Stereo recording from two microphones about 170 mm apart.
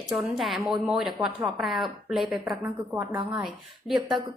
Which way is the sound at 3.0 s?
20° right (ahead or behind).